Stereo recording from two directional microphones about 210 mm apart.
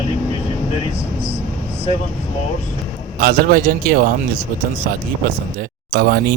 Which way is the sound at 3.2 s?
45° right (ahead or behind).